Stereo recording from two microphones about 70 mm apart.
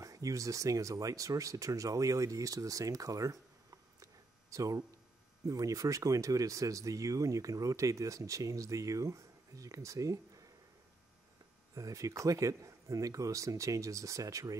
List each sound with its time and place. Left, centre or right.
0.0 s speech: right
4.0 s a sound: right
5.5 s speech: right
11.7 s speech: right